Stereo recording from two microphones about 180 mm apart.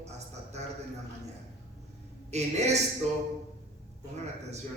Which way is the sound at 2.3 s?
40° right (ahead or behind).